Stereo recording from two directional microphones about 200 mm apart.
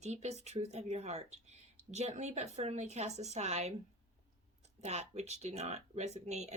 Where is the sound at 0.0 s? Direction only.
35° right (ahead or behind).